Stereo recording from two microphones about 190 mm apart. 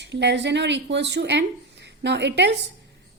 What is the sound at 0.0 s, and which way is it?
A woman's voice, 65° right (ahead or behind).